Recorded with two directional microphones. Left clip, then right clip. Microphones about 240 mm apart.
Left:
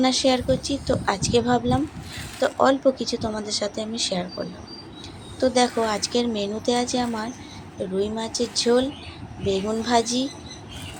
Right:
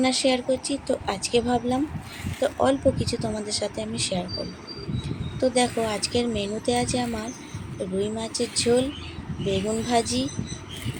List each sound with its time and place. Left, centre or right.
0.0 s speech: centre
5.4 s speech: centre